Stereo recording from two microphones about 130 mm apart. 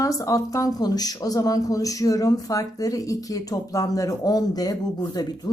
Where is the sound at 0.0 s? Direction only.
25° left (ahead or behind).